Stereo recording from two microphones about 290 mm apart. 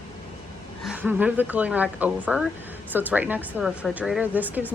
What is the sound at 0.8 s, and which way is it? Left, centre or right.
Speech, centre.